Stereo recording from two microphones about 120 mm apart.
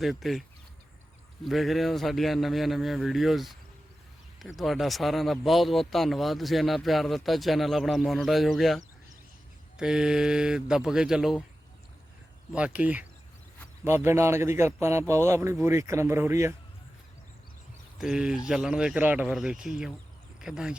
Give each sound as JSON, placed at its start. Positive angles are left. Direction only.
{"t": 0.0, "sound": "speech", "side_deg": 0}
{"t": 1.5, "sound": "speech", "side_deg": 0}
{"t": 12.5, "sound": "a man's voice", "side_deg": -10}
{"t": 17.9, "sound": "speech", "side_deg": -5}